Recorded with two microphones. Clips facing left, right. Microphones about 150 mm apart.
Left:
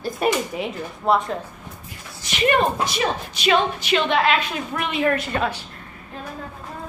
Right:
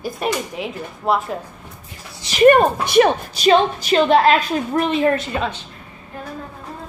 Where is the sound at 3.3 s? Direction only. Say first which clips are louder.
Right 5 dB; 40° right (ahead or behind).